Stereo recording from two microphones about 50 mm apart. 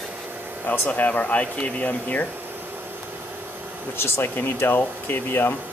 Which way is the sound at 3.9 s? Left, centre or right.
Left.